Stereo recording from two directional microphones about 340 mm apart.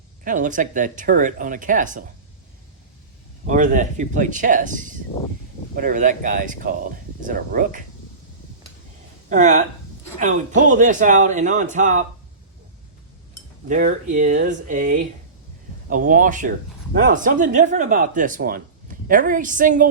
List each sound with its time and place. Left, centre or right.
0.3 s speech: right
3.4 s speech: right
9.3 s speech: right
13.7 s speech: right